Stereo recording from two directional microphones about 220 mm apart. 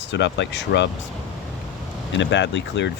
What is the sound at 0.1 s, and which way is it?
Speech, 55° left (ahead or behind).